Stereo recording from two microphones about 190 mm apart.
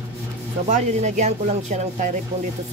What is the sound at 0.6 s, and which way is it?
Speech, 35° right (ahead or behind).